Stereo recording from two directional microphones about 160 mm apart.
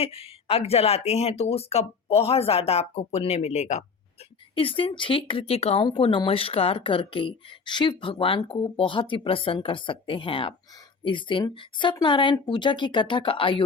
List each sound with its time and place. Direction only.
0.0 s speech: 40° left (ahead or behind)
4.5 s speech: 35° left (ahead or behind)